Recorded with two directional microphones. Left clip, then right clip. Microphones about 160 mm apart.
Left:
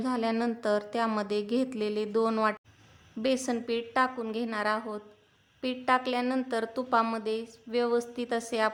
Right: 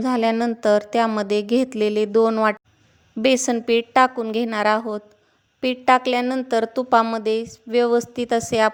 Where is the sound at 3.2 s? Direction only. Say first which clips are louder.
Right 11 dB; 50° right (ahead or behind).